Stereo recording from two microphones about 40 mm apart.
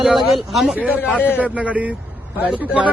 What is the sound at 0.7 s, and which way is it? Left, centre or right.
Speech, right.